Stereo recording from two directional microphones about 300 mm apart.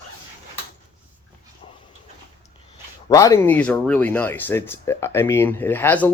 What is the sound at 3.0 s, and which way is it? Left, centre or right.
Speech, centre.